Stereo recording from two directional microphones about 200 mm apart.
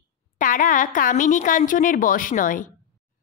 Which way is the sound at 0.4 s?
40° left (ahead or behind).